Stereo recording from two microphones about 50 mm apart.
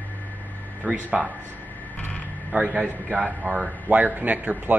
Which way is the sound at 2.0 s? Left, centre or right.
Left.